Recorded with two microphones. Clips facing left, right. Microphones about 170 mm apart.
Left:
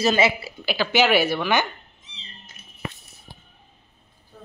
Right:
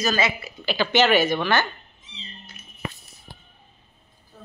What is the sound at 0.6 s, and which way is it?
Speech, 10° left (ahead or behind).